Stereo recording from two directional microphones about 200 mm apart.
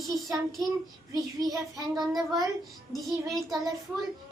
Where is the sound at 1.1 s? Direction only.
20° right (ahead or behind).